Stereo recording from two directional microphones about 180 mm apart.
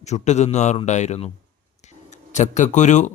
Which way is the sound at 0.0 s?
40° left (ahead or behind).